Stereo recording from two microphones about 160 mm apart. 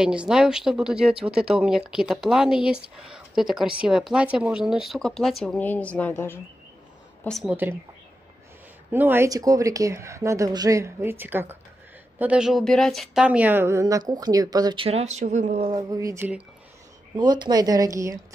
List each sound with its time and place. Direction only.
0.0 s speech: 5° right (ahead or behind); by 6.3 s 10° left (ahead or behind)
7.2 s speech: centre (ahead or behind)
8.9 s a woman's voice: 15° right (ahead or behind)
14.9 s speech: 45° right (ahead or behind)
15.6 s speech: 25° right (ahead or behind)